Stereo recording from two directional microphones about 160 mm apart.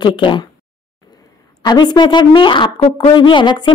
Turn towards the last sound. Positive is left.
turn(degrees=30)  # may be behind; listen again after turning